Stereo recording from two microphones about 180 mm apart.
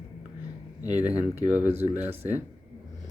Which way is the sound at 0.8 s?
20° left (ahead or behind).